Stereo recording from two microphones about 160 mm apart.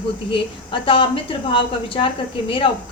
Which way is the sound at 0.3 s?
35° left (ahead or behind).